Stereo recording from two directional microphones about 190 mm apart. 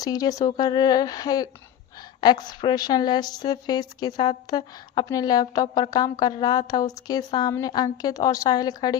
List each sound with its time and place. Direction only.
0.0 s a woman's voice: 20° left (ahead or behind)